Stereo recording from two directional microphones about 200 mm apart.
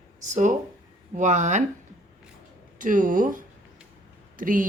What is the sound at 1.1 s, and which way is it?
Speech, 35° right (ahead or behind).